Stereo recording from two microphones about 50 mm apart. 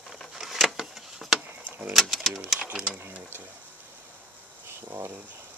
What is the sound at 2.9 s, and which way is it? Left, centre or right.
Speech, right.